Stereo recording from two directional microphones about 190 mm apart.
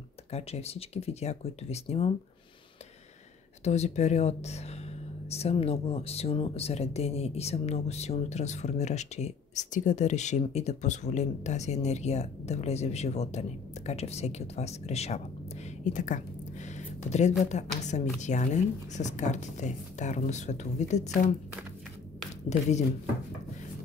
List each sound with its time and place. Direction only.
0.3 s speech: 35° left (ahead or behind)
3.6 s speech: 35° left (ahead or behind)
15.8 s a sound: 40° left (ahead or behind)
17.5 s speech: 35° left (ahead or behind)
22.5 s speech: 35° left (ahead or behind)